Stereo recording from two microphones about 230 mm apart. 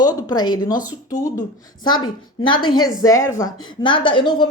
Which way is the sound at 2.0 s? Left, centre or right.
Centre.